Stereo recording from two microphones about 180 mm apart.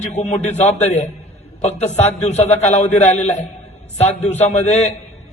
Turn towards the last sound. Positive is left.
turn(degrees=40)  # may be behind; listen again after turning